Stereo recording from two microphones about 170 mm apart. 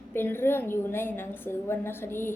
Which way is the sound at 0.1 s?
15° left (ahead or behind).